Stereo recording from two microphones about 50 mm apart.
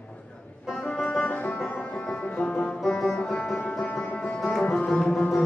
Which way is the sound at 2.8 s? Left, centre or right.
Centre.